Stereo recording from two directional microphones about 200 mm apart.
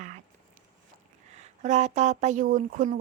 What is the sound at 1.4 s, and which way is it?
Speech, 35° right (ahead or behind).